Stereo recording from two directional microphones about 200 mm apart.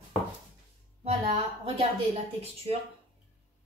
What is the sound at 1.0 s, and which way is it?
Speech, 30° right (ahead or behind).